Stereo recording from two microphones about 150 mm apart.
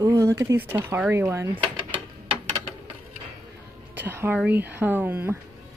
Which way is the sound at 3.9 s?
15° right (ahead or behind).